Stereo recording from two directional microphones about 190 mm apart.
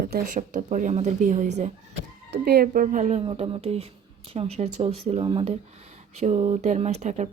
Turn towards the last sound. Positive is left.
turn(degrees=-40)  # may be behind; listen again after turning